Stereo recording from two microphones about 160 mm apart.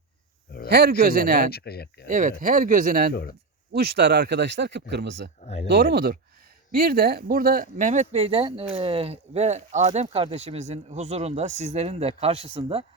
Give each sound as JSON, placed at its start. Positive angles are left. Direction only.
{"t": 0.7, "sound": "a man's voice", "side_deg": -80}
{"t": 1.5, "sound": "speech", "side_deg": 75}
{"t": 2.0, "sound": "speech", "side_deg": -55}
{"t": 3.7, "sound": "a man's voice", "side_deg": -90}